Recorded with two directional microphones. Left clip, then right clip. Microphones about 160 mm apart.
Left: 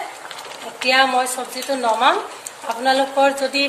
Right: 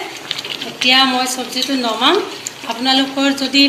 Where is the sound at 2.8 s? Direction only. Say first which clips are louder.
Even; 70° left (ahead or behind).